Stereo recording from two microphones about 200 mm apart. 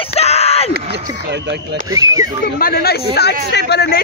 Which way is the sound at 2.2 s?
45° left (ahead or behind).